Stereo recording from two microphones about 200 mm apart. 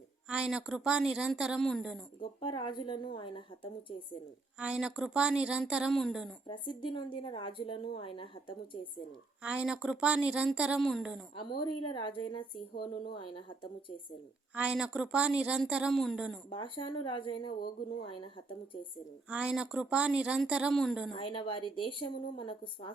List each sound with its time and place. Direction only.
0.3 s a woman's voice: 5° right (ahead or behind)
2.4 s a woman's voice: 25° left (ahead or behind)
4.6 s a woman's voice: 5° right (ahead or behind)
6.5 s a woman's voice: 25° left (ahead or behind)
9.4 s a woman's voice: 5° right (ahead or behind)
11.3 s a woman's voice: 25° left (ahead or behind)
14.5 s a woman's voice: 5° right (ahead or behind)
16.5 s a woman's voice: 25° left (ahead or behind)
19.3 s a woman's voice: 5° right (ahead or behind)
21.2 s a woman's voice: 25° left (ahead or behind)